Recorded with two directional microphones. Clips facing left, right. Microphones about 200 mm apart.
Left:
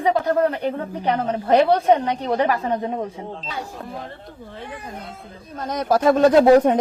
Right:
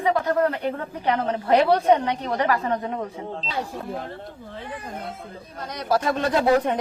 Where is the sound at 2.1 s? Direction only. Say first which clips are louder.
Left 3 dB; 25° left (ahead or behind).